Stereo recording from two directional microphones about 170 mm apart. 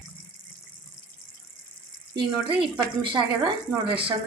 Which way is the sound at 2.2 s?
30° right (ahead or behind).